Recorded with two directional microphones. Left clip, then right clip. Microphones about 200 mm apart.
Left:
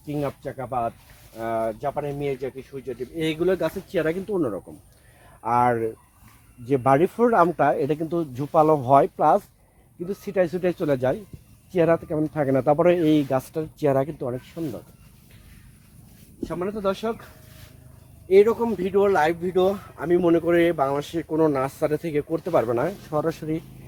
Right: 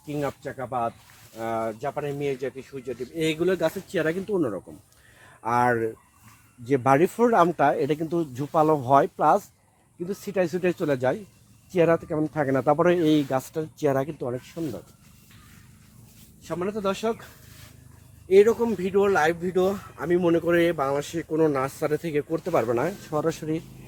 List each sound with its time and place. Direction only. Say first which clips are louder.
0.0 s speech: left 1 dB; 30° left (ahead or behind)
14.5 s speech: left 1 dB; 10° left (ahead or behind)
16.4 s speech: left 1 dB; 5° left (ahead or behind)
18.3 s speech: left 1 dB; 15° left (ahead or behind)